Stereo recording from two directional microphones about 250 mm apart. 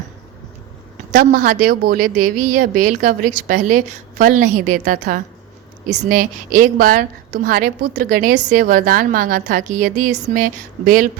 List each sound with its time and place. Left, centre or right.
1.1 s a woman's voice: right